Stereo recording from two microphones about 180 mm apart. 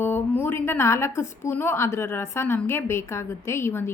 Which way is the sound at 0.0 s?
10° left (ahead or behind).